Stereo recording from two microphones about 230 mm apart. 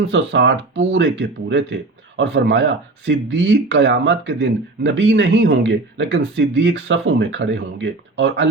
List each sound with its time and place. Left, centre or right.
0.1 s speech: right